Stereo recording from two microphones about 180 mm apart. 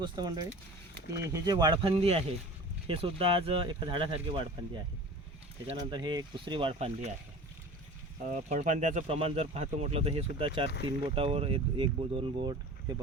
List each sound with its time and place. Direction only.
0.0 s speech: 20° right (ahead or behind)
8.3 s speech: 45° right (ahead or behind); by 12.5 s 30° right (ahead or behind)